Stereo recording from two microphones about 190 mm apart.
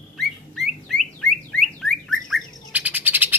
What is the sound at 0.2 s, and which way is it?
Car alarm, centre (ahead or behind).